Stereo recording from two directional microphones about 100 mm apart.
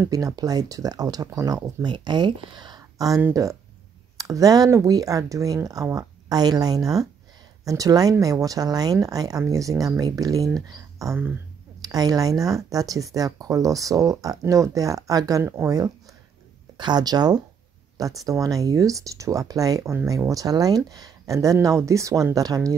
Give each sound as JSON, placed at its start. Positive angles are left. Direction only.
{"t": 0.1, "sound": "speech", "side_deg": -35}
{"t": 1.9, "sound": "speech", "side_deg": -50}
{"t": 4.2, "sound": "speech", "side_deg": -35}
{"t": 15.4, "sound": "speech", "side_deg": -25}
{"t": 16.7, "sound": "speech", "side_deg": -45}